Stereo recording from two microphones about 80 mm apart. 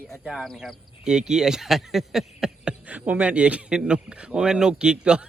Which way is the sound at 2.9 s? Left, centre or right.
Centre.